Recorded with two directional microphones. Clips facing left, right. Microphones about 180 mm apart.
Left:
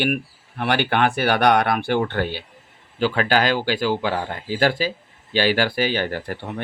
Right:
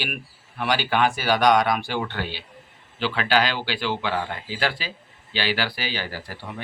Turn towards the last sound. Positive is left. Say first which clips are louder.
# left 8 dB
turn(degrees=55)  # may be behind; listen again after turning